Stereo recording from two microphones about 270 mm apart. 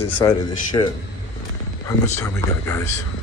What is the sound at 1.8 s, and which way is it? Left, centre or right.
Speech, centre.